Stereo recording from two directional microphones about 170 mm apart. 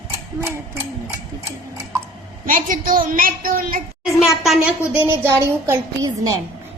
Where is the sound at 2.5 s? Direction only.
55° right (ahead or behind).